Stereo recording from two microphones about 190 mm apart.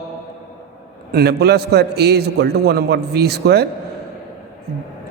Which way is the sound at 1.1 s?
60° right (ahead or behind).